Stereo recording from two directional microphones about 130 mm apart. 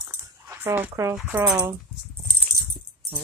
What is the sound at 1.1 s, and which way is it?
Speech, centre (ahead or behind).